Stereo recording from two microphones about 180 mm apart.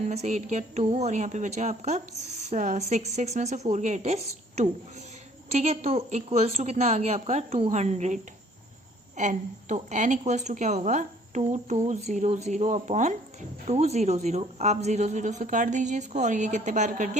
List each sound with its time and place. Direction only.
0.1 s a woman's voice: 40° right (ahead or behind)